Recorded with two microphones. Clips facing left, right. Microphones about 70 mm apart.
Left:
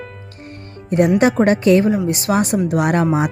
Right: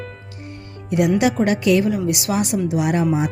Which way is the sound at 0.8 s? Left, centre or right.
Left.